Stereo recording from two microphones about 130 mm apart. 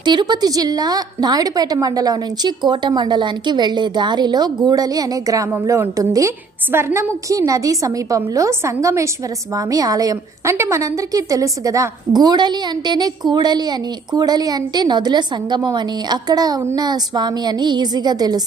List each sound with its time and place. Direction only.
0.0 s a woman's voice: 35° right (ahead or behind)